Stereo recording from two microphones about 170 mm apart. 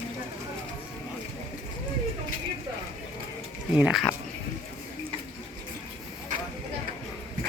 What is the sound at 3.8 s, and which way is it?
Speech, 5° right (ahead or behind).